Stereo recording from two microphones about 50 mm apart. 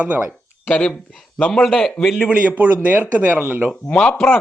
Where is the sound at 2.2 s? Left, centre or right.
Right.